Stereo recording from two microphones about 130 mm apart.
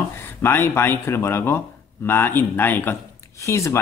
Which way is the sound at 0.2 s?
15° left (ahead or behind).